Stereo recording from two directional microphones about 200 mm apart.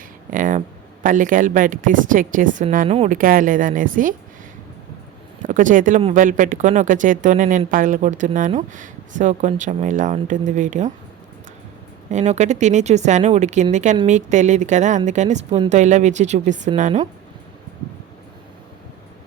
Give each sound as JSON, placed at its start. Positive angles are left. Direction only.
{"t": 0.3, "sound": "a woman's voice", "side_deg": -40}
{"t": 5.4, "sound": "a woman's voice", "side_deg": -40}
{"t": 12.1, "sound": "a woman's voice", "side_deg": -35}